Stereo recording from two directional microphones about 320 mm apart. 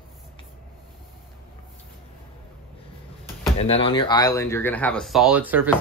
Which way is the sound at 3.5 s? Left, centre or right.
Centre.